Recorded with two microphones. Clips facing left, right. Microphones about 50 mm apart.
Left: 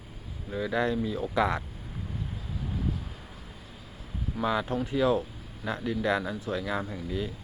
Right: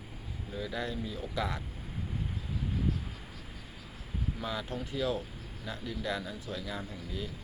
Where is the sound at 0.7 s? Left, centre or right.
Left.